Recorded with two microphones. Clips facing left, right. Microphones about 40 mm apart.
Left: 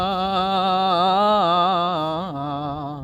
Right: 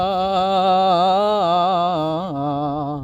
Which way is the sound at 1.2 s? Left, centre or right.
Centre.